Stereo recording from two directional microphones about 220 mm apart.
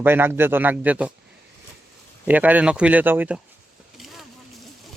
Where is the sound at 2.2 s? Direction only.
5° right (ahead or behind).